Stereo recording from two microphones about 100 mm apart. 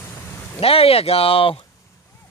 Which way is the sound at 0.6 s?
75° left (ahead or behind).